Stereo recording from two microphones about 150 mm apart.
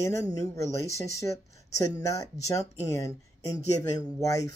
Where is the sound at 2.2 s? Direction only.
20° left (ahead or behind).